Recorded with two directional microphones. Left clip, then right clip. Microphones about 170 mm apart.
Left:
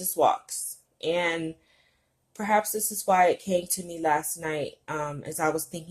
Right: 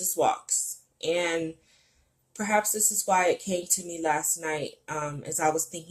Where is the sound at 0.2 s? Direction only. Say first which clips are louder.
Left 2 dB; 30° left (ahead or behind).